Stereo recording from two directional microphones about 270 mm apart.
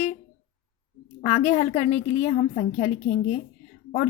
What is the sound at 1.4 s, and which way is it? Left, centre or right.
Speech, left.